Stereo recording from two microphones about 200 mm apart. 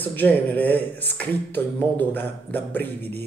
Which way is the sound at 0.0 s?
10° left (ahead or behind).